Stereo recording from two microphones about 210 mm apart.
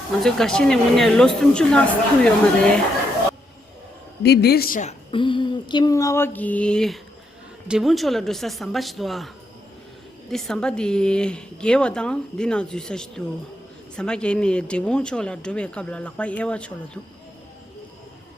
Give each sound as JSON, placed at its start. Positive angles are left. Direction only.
{"t": 0.2, "sound": "speech", "side_deg": 0}
{"t": 4.2, "sound": "a woman's voice", "side_deg": 50}